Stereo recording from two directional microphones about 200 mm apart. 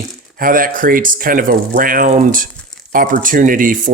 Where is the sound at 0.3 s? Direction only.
45° right (ahead or behind).